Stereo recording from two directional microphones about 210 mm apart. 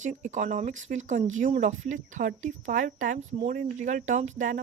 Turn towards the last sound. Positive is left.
turn(degrees=-35)  # may be behind; listen again after turning